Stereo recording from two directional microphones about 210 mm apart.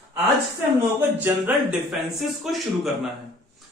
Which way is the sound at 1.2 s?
5° right (ahead or behind).